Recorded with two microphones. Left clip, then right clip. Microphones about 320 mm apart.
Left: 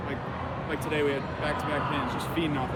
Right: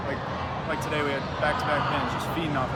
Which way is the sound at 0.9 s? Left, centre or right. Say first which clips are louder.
Left 2 dB; centre.